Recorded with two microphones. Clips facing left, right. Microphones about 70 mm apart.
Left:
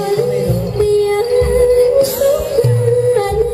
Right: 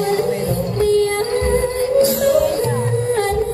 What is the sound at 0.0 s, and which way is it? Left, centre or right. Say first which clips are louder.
Music: left 4 dB; right.